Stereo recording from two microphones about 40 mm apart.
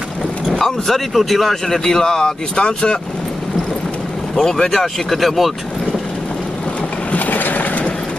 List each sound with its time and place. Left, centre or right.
0.6 s a man's voice: centre; by 3.0 s left
4.4 s a man's voice: centre
7.1 s vehicle: left